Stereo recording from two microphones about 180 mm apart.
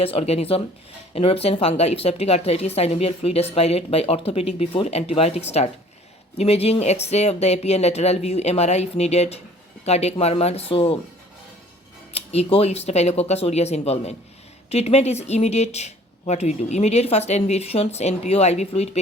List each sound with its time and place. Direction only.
0.0 s speech: 35° left (ahead or behind)
12.1 s speech: 35° left (ahead or behind)